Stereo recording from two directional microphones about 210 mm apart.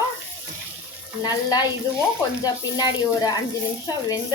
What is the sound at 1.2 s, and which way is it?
Speech, 20° left (ahead or behind).